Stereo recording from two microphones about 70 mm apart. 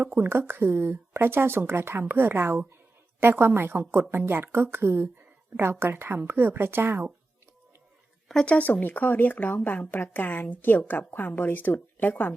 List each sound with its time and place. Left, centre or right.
0.0 s speech: right
8.3 s speech: centre
8.5 s a woman's voice: left